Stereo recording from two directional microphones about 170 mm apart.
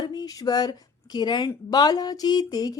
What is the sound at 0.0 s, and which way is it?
Speech, 25° left (ahead or behind).